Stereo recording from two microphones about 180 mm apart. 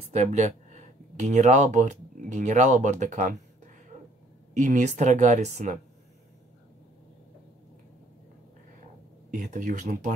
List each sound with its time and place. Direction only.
0.1 s speech: 40° right (ahead or behind)
4.6 s speech: 40° right (ahead or behind)
9.3 s speech: 45° right (ahead or behind)